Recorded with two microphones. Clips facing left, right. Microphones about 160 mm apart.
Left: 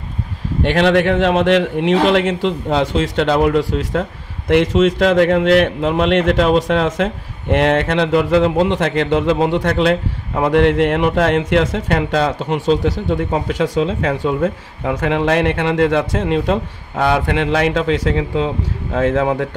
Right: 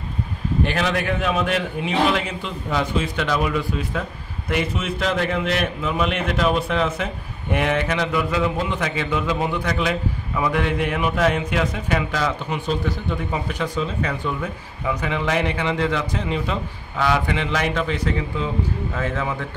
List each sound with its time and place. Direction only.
0.6 s a man's voice: 75° left (ahead or behind)
4.5 s a man's voice: 80° left
5.2 s a man's voice: 70° left (ahead or behind); by 18.5 s 90° left
18.9 s a man's voice: 80° left